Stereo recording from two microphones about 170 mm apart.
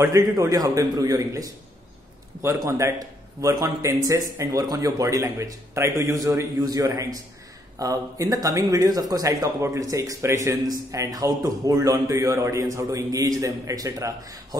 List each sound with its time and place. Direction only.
0.0 s a man's voice: 15° right (ahead or behind)